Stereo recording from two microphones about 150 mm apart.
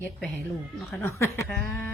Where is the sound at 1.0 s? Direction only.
20° left (ahead or behind).